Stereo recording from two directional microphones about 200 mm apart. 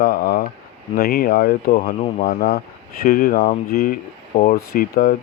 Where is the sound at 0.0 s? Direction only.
45° left (ahead or behind).